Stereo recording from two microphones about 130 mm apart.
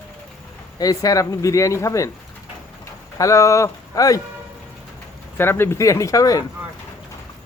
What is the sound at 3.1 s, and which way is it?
Speech, 25° left (ahead or behind).